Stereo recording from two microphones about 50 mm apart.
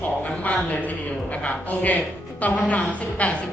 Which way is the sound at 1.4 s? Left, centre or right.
Left.